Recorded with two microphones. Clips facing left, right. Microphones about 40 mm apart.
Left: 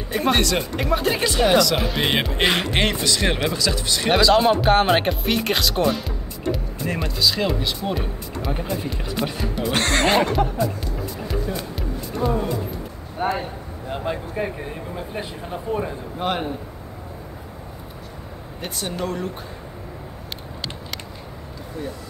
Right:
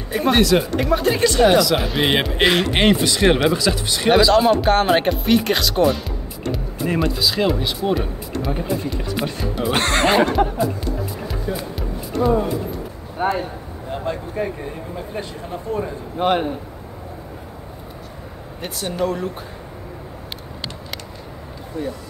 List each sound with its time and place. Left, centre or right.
0.1 s speech: centre
2.8 s speech: centre
4.1 s speech: centre
9.6 s speech: centre
11.1 s music: centre
12.3 s speech: centre
13.9 s speech: centre
16.2 s speech: right
18.6 s speech: centre